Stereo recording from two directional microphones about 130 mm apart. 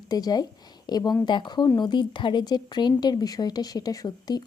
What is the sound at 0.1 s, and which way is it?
A woman's voice, 30° left (ahead or behind).